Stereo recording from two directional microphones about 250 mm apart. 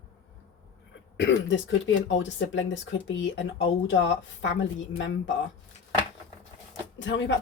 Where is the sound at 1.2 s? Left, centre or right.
Left.